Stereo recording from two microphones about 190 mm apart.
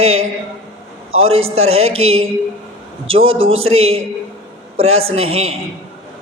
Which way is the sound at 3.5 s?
90° right.